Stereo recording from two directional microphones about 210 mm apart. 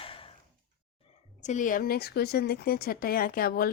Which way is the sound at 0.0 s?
25° left (ahead or behind).